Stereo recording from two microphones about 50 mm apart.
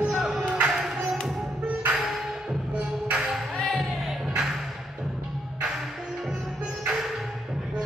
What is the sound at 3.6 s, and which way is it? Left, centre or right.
Music, centre.